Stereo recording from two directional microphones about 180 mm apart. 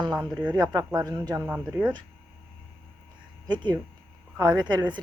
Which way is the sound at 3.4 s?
25° right (ahead or behind).